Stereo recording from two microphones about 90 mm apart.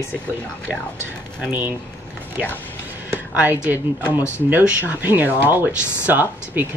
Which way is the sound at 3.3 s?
15° right (ahead or behind).